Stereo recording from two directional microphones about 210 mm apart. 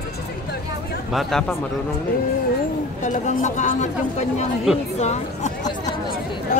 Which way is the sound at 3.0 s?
35° left (ahead or behind).